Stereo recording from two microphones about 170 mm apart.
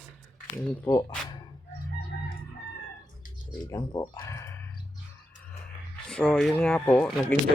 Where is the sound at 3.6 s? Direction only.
20° left (ahead or behind).